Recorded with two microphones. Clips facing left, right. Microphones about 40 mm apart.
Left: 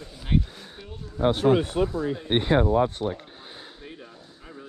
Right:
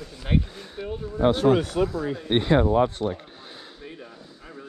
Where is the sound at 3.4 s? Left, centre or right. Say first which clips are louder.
Even; centre.